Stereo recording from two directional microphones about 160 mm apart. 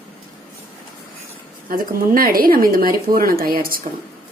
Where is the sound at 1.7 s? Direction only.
65° right (ahead or behind).